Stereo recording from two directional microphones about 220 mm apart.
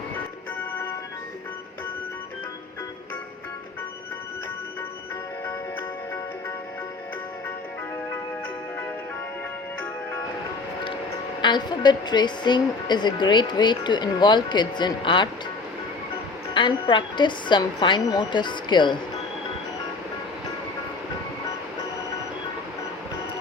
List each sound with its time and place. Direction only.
11.4 s a woman's voice: 20° left (ahead or behind)
16.6 s a woman's voice: 20° left (ahead or behind)